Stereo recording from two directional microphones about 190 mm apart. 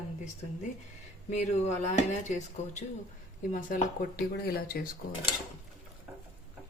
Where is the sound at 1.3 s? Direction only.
35° left (ahead or behind).